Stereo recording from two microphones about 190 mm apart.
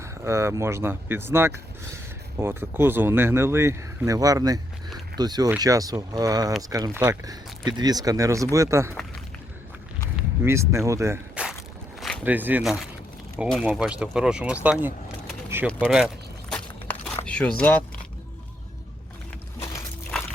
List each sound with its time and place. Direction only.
0.0 s speech: 15° right (ahead or behind)
10.2 s speech: 15° right (ahead or behind)
11.9 s a sound: centre (ahead or behind)
12.2 s speech: 10° right (ahead or behind)
15.6 s walk: centre (ahead or behind)
17.2 s a sound: 5° left (ahead or behind)
17.6 s speech: 10° left (ahead or behind)